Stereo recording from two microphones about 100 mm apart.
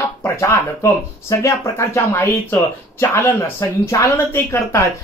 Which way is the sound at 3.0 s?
25° left (ahead or behind).